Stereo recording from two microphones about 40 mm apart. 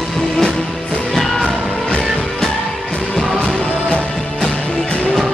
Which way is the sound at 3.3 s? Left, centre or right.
Left.